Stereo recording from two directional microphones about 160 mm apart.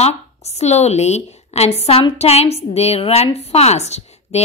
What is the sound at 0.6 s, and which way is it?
A woman's voice, 45° left (ahead or behind).